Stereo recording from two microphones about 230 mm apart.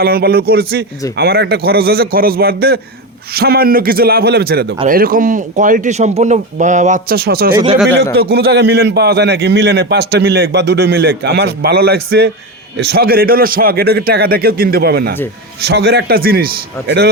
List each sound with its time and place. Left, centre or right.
0.0 s a man's voice: right
7.5 s speech: right
8.1 s a man's voice: right